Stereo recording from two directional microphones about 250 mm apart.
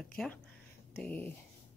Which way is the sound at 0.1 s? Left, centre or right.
Centre.